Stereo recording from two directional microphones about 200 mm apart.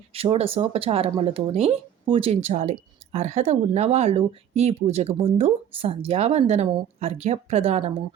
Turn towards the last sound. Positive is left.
turn(degrees=-30)  # may be behind; listen again after turning